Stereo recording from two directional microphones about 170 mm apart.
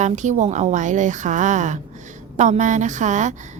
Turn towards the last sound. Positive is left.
turn(degrees=-45)  # may be behind; listen again after turning